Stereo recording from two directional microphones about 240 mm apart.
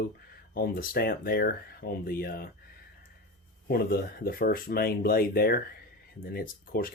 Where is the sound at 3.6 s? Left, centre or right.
Left.